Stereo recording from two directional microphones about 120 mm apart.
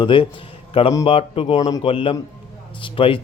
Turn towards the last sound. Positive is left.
turn(degrees=45)  # may be behind; listen again after turning